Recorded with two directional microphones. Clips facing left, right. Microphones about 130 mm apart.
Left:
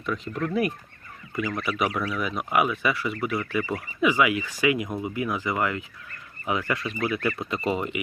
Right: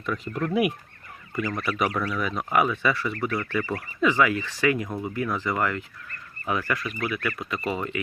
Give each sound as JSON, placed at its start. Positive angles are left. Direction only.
{"t": 0.0, "sound": "speech", "side_deg": 0}